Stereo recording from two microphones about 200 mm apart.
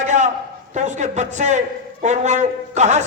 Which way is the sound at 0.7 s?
35° right (ahead or behind).